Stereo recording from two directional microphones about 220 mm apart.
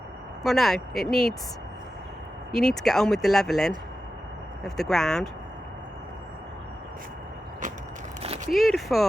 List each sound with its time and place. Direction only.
0.4 s speech: centre (ahead or behind)
2.5 s speech: centre (ahead or behind)
8.4 s speech: centre (ahead or behind)